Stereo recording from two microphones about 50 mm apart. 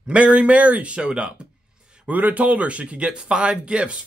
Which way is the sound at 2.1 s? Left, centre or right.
Right.